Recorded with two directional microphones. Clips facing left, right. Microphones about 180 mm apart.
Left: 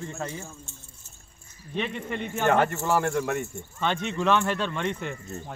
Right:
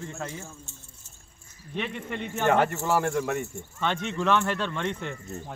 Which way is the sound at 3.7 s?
15° left (ahead or behind).